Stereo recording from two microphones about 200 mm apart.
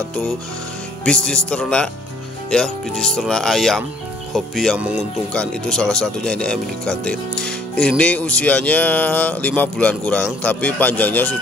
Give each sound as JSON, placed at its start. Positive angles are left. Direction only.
{"t": 1.0, "sound": "speech", "side_deg": 5}